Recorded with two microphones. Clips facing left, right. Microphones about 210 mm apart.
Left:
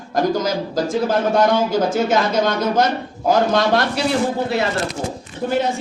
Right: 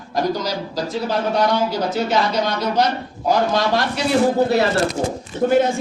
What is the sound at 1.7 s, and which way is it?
A man's voice, 50° left (ahead or behind).